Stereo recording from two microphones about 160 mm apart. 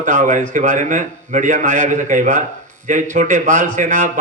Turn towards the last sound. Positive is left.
turn(degrees=-50)  # may be behind; listen again after turning